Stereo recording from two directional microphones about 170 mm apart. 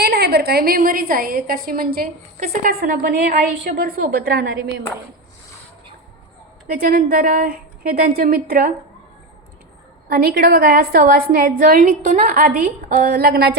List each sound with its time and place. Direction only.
0.0 s a woman's voice: 70° right (ahead or behind)
6.7 s a woman's voice: 60° right (ahead or behind)
10.1 s a woman's voice: 60° right (ahead or behind)